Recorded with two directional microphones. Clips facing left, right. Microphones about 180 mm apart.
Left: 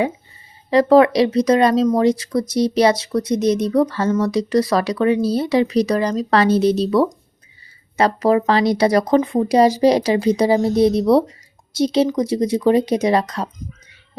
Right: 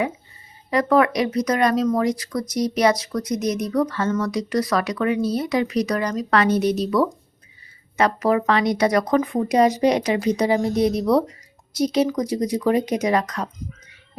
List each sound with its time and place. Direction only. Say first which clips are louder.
0.7 s speech: left 6 dB; 30° left (ahead or behind)